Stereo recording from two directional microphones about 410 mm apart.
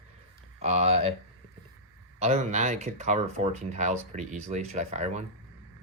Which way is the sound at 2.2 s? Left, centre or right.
Centre.